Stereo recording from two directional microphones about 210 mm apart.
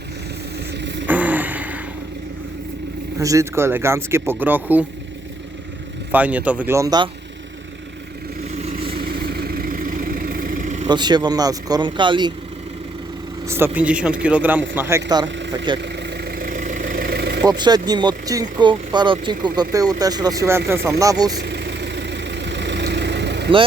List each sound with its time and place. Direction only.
0.7 s vehicle: 55° right (ahead or behind)
1.0 s a sound: 5° right (ahead or behind)
3.2 s speech: 15° right (ahead or behind)
6.1 s speech: 5° right (ahead or behind)
8.5 s vehicle: 30° right (ahead or behind)
9.0 s vehicle: 45° right (ahead or behind)
10.8 s speech: 20° right (ahead or behind)
13.5 s a man's voice: 10° right (ahead or behind)
15.8 s vehicle: 55° right (ahead or behind)
17.4 s speech: 20° right (ahead or behind)
21.3 s vehicle: 55° right (ahead or behind)